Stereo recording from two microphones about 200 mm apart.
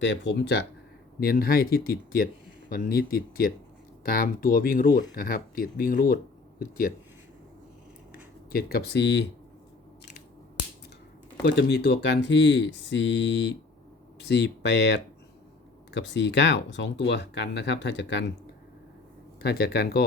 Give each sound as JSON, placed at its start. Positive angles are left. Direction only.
{"t": 0.0, "sound": "speech", "side_deg": 60}
{"t": 1.2, "sound": "speech", "side_deg": 50}
{"t": 8.5, "sound": "speech", "side_deg": 50}
{"t": 11.4, "sound": "speech", "side_deg": 55}
{"t": 19.4, "sound": "speech", "side_deg": 55}